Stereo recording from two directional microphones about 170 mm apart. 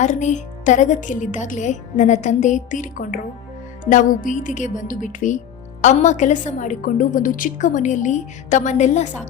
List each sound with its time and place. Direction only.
0.0 s a woman's voice: 45° left (ahead or behind)